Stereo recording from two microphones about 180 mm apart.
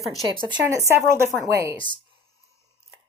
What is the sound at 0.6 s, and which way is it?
Speech, 15° right (ahead or behind).